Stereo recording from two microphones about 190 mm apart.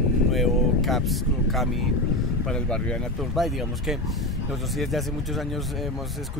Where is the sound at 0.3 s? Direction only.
Centre (ahead or behind).